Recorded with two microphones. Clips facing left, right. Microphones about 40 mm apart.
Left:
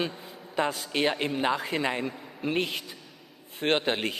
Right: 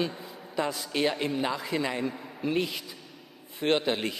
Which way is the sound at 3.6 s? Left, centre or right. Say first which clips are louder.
Even; left.